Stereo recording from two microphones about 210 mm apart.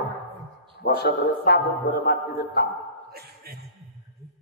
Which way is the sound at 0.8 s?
45° left (ahead or behind).